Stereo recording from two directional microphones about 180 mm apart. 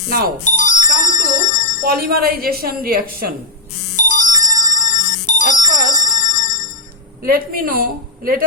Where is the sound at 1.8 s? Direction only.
55° right (ahead or behind).